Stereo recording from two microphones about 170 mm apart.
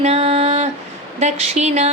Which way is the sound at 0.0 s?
40° right (ahead or behind).